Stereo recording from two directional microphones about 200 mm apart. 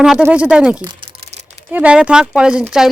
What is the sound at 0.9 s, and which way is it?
Crumpling, 25° right (ahead or behind).